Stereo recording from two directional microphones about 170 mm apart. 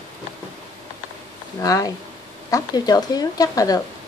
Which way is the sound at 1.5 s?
20° left (ahead or behind).